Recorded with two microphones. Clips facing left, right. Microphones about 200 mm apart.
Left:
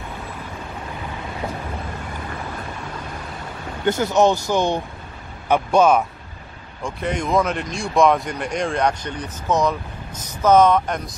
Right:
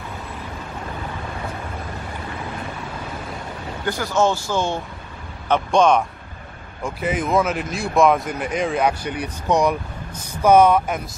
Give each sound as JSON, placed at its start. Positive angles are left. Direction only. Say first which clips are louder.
{"t": 3.8, "sound": "speech", "louder": "left 3 dB", "side_deg": 20}
{"t": 6.8, "sound": "speech", "louder": "right 1 dB", "side_deg": -5}